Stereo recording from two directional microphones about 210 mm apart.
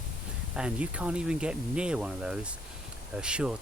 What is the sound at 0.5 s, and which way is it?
Speech, 5° right (ahead or behind).